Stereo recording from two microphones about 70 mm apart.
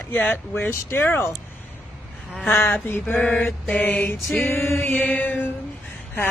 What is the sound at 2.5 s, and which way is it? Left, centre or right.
Mantra, left.